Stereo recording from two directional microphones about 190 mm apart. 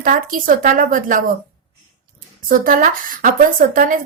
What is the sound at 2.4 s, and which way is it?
Speech, 45° right (ahead or behind).